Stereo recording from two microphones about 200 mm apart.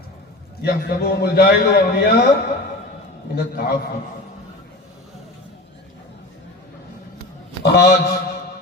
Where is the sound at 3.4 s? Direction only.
50° left (ahead or behind).